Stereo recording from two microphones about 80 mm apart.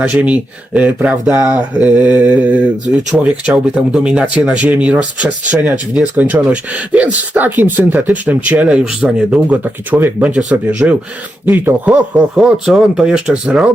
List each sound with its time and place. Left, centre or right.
0.0 s speech: centre
12.4 s speech: centre